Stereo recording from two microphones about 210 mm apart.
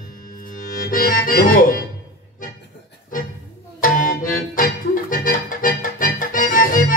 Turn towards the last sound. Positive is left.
turn(degrees=40)  # may be behind; listen again after turning